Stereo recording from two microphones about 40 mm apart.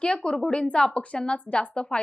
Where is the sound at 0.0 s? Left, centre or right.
Left.